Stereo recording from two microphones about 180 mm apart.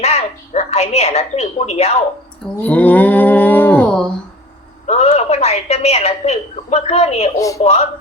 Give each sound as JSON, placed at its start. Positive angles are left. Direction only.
{"t": 0.0, "sound": "a woman's voice", "side_deg": 35}
{"t": 2.6, "sound": "livestock", "side_deg": 10}
{"t": 4.9, "sound": "a woman's voice", "side_deg": 35}